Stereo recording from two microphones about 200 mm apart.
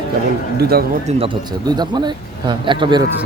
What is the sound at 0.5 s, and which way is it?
Speech, 50° right (ahead or behind).